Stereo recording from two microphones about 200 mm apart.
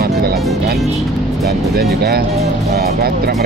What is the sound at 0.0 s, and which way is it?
Music, 50° right (ahead or behind).